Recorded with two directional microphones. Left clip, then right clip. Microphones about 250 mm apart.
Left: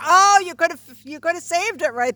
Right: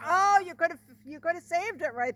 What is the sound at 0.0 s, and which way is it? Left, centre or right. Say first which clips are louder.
Speech: left 10 dB; left.